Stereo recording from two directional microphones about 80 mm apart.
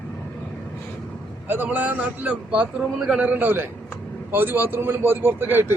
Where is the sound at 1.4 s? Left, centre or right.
Right.